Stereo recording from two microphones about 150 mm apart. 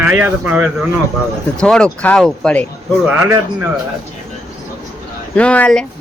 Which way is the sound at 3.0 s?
10° right (ahead or behind).